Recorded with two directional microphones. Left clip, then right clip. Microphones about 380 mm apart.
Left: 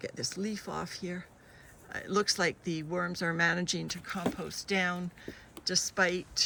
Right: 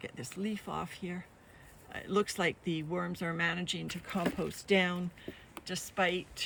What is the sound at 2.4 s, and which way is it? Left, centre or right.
Speech, centre.